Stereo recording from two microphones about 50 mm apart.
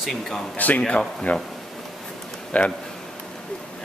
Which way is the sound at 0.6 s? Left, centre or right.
Left.